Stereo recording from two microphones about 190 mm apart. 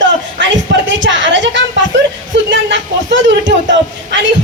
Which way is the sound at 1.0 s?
75° right (ahead or behind).